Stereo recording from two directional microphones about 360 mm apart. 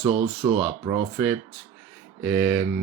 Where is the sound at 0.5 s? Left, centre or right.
Centre.